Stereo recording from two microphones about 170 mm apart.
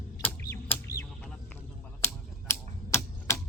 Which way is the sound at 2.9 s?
15° left (ahead or behind).